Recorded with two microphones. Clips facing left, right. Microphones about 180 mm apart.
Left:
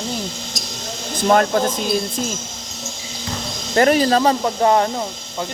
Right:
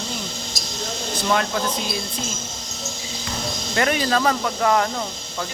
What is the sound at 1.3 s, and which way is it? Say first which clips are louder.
Speech: left 7 dB; 45° left (ahead or behind).